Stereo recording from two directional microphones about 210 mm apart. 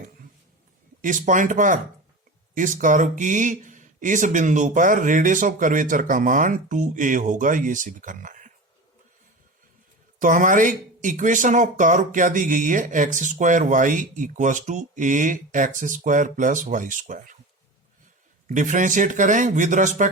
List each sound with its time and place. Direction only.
1.0 s speech: 40° right (ahead or behind)
10.2 s speech: 40° right (ahead or behind)
18.4 s speech: 40° right (ahead or behind)